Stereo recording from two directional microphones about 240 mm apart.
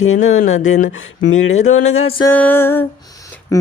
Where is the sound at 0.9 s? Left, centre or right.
Left.